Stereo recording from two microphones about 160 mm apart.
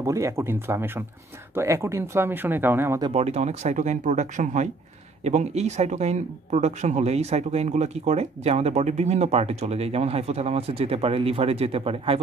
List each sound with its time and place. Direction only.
0.0 s speech: 20° right (ahead or behind)
3.1 s speech: 40° right (ahead or behind)